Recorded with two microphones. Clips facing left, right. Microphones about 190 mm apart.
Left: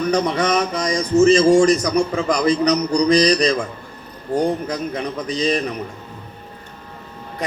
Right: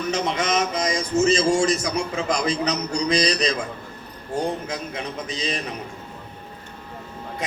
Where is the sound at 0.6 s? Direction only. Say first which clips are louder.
Left 3 dB; 35° left (ahead or behind).